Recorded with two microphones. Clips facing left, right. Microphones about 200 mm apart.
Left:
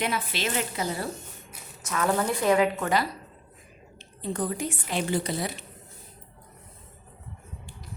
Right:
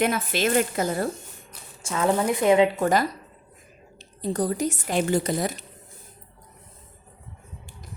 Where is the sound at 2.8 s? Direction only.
45° right (ahead or behind).